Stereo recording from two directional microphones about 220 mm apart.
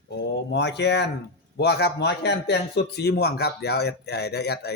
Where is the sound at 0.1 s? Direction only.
50° left (ahead or behind).